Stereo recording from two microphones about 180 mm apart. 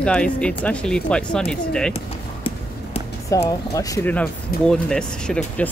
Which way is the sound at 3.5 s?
20° left (ahead or behind).